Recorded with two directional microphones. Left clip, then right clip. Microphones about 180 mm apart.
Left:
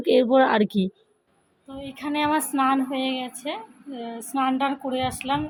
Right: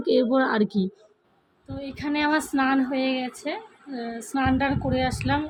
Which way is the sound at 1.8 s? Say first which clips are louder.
Even; 15° right (ahead or behind).